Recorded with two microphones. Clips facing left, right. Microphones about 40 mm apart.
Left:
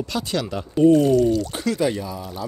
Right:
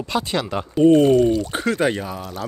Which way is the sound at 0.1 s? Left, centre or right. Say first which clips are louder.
Right 6 dB; right.